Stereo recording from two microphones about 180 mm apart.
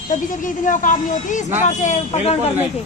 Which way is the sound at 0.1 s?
45° left (ahead or behind).